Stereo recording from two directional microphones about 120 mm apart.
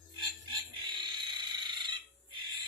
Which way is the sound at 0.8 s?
40° right (ahead or behind).